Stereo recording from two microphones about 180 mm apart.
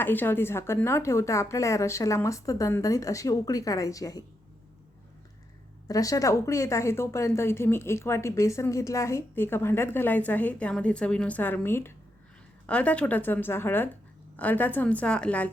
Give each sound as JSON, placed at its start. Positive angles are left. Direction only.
{"t": 0.0, "sound": "speech", "side_deg": 10}
{"t": 5.9, "sound": "speech", "side_deg": 20}